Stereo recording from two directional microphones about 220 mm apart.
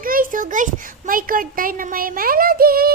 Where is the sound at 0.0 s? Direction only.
40° right (ahead or behind).